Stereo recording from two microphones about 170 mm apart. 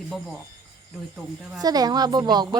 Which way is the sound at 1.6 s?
20° right (ahead or behind).